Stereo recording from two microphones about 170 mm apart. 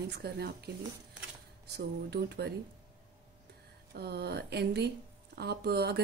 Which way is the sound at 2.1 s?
75° right (ahead or behind).